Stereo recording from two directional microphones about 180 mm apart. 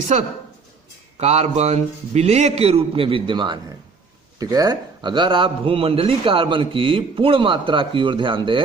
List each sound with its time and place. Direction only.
1.2 s a man's voice: 40° right (ahead or behind)